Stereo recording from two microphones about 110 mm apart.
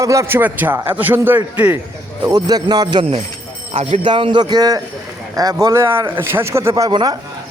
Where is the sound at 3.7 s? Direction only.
70° right (ahead or behind).